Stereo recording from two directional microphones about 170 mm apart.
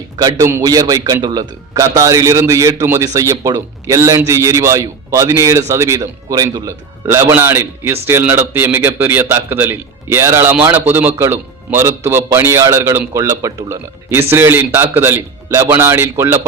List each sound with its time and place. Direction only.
0.2 s a man's voice: 20° right (ahead or behind)